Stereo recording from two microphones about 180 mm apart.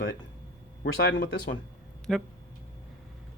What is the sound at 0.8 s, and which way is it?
Speech, 80° left.